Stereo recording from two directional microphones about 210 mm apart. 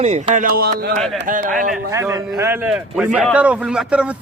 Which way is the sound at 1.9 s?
15° right (ahead or behind).